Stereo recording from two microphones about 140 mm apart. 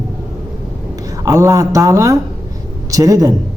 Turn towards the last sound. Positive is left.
turn(degrees=-25)  # may be behind; listen again after turning